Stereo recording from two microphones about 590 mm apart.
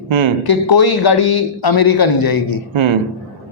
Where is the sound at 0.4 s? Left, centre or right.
Left.